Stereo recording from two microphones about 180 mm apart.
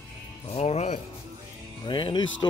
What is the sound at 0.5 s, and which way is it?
Speech, 35° left (ahead or behind).